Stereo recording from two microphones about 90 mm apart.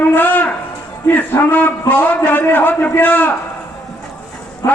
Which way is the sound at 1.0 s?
20° left (ahead or behind).